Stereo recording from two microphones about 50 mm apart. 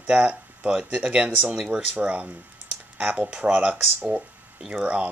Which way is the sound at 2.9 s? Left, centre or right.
Right.